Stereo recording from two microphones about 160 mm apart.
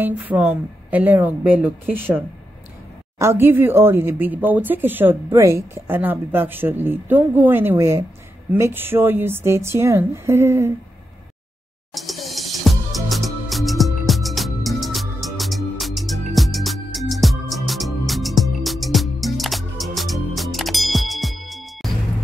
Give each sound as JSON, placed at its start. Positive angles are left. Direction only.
{"t": 0.2, "sound": "speech", "side_deg": -10}
{"t": 11.9, "sound": "music", "side_deg": 0}